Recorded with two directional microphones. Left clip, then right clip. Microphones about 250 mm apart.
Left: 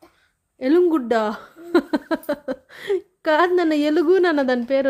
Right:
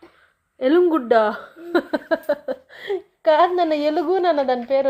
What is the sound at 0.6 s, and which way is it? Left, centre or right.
Speech, left.